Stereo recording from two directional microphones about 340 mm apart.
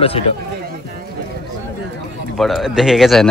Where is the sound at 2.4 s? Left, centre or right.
Centre.